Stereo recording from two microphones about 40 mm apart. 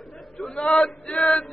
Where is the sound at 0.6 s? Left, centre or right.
Centre.